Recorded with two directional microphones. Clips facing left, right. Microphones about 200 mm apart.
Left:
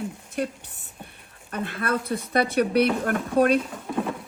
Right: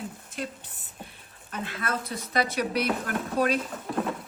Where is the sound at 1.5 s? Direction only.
55° left (ahead or behind).